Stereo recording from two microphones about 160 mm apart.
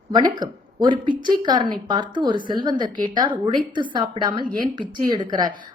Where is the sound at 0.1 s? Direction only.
25° right (ahead or behind).